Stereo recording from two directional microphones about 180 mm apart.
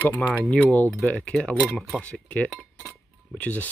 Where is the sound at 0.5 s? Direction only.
10° left (ahead or behind).